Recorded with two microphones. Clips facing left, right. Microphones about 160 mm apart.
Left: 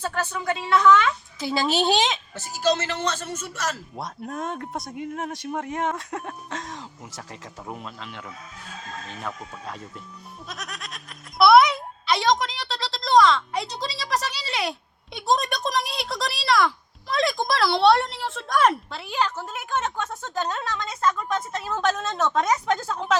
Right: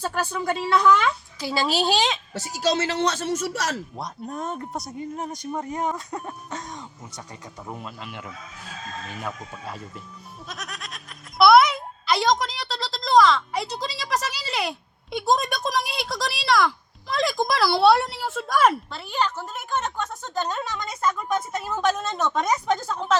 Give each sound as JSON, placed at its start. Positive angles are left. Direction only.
{"t": 0.0, "sound": "a woman's voice", "side_deg": -10}
{"t": 1.4, "sound": "a child's voice", "side_deg": 0}
{"t": 3.2, "sound": "a man's voice", "side_deg": -75}
{"t": 3.9, "sound": "speech", "side_deg": 0}
{"t": 10.5, "sound": "a sound", "side_deg": 0}
{"t": 19.1, "sound": "a woman's voice", "side_deg": 5}
{"t": 21.2, "sound": "a woman's voice", "side_deg": -20}
{"t": 21.6, "sound": "a woman's voice", "side_deg": 0}